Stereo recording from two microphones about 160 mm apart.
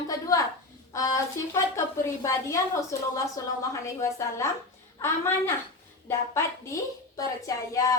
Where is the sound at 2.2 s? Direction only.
20° left (ahead or behind).